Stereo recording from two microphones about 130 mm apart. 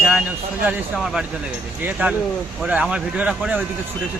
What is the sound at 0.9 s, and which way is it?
Speech, centre (ahead or behind).